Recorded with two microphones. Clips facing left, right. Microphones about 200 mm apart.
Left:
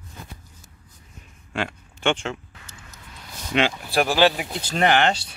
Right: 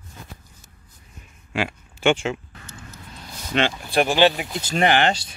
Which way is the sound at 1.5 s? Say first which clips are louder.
Right 2 dB; 5° right (ahead or behind).